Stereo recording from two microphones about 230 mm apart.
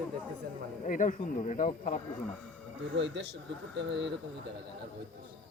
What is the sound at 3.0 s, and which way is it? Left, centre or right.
Speech, right.